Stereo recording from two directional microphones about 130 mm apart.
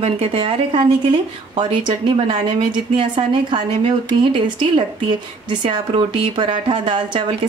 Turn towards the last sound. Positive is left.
turn(degrees=-40)  # may be behind; listen again after turning